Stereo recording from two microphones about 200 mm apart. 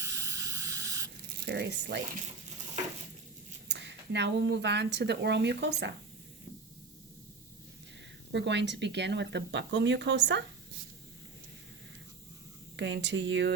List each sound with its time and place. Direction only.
0.0 s spray: 15° right (ahead or behind)
1.5 s a woman's voice: 55° right (ahead or behind)
3.7 s a woman's voice: 60° right (ahead or behind)
8.3 s a woman's voice: 60° right (ahead or behind)
12.7 s a woman's voice: 65° right (ahead or behind)